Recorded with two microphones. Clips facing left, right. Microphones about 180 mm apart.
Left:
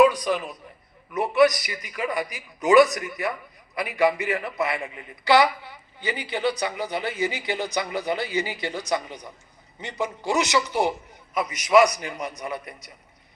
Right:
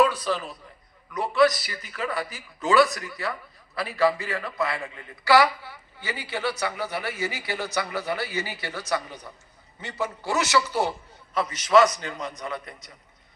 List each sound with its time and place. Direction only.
0.0 s a sound: 15° left (ahead or behind)
1.1 s a man's voice: 20° left (ahead or behind)
11.9 s a man's voice: 15° left (ahead or behind)